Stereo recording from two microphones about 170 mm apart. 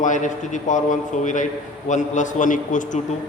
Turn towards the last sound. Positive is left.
turn(degrees=50)  # may be behind; listen again after turning